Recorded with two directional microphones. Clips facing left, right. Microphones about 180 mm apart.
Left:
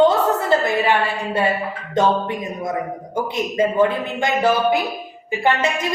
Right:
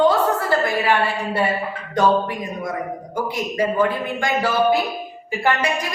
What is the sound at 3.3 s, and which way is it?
A woman's voice, 25° left (ahead or behind).